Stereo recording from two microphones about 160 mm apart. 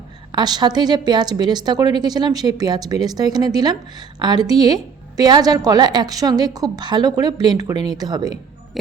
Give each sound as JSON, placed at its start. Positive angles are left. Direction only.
{"t": 0.3, "sound": "a woman's voice", "side_deg": -25}
{"t": 8.7, "sound": "hum", "side_deg": 0}